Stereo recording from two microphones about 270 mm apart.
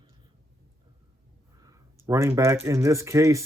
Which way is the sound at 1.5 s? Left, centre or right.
Centre.